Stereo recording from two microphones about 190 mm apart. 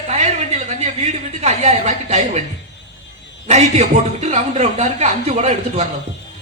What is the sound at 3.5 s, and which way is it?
A woman's voice, 35° right (ahead or behind).